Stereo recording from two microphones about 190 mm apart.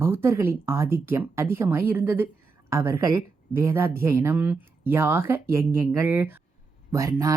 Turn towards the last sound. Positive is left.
turn(degrees=-15)  # may be behind; listen again after turning